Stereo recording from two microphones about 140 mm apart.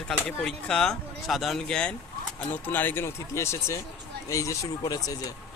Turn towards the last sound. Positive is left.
turn(degrees=25)  # may be behind; listen again after turning